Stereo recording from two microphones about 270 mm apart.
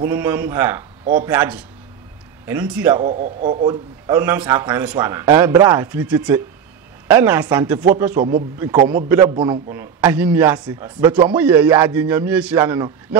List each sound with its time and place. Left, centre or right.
0.0 s speech: centre
3.1 s a man's voice: right
3.6 s speech: centre